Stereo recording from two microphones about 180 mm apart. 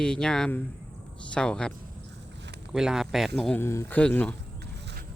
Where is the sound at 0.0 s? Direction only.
5° left (ahead or behind).